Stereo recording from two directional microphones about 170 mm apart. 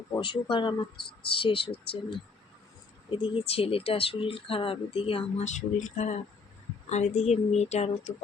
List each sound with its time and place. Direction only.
0.1 s speech: 30° left (ahead or behind)
0.9 s speech: 70° left (ahead or behind)
1.3 s speech: 30° left (ahead or behind)
3.1 s speech: 30° left (ahead or behind)